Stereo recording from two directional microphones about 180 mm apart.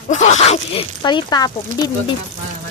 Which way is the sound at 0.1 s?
40° left (ahead or behind).